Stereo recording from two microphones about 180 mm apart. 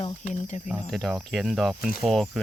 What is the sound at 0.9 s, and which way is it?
Speech, centre (ahead or behind).